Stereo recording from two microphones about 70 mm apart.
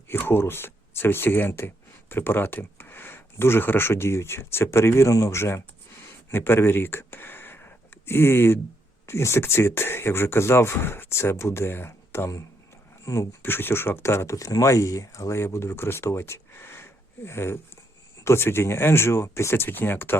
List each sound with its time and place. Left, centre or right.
0.1 s speech: left
6.3 s a sound: left
9.0 s speech: left
13.4 s speech: left
14.3 s speech: left